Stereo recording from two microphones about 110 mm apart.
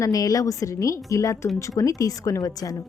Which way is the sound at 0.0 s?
35° left (ahead or behind).